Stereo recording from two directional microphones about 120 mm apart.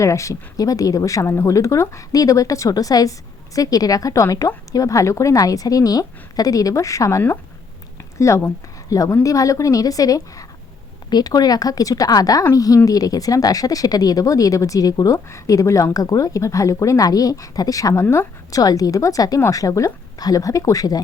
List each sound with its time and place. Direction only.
0.0 s speech: 25° left (ahead or behind)